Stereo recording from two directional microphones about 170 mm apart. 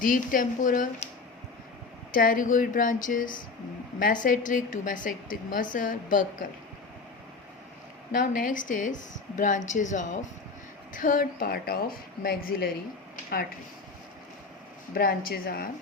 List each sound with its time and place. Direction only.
0.0 s a woman's voice: 55° left (ahead or behind)
2.1 s a woman's voice: 55° left (ahead or behind)
8.1 s a woman's voice: 55° left (ahead or behind)
14.9 s a woman's voice: 60° left (ahead or behind)